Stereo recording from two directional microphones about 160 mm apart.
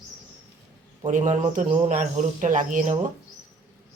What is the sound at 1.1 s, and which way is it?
Speech, 50° right (ahead or behind).